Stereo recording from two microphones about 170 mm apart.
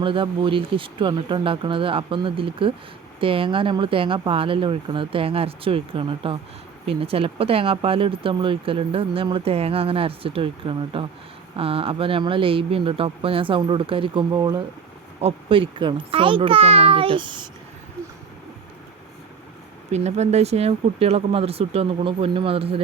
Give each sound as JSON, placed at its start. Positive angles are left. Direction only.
{"t": 0.0, "sound": "speech", "side_deg": -30}
{"t": 19.9, "sound": "speech", "side_deg": -40}